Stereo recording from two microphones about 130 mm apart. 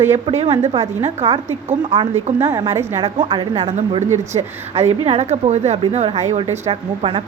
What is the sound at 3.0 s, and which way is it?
Speech, 35° right (ahead or behind).